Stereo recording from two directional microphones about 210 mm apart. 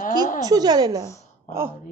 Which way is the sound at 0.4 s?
20° right (ahead or behind).